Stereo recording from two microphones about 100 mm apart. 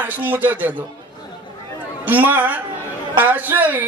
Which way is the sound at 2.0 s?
20° right (ahead or behind).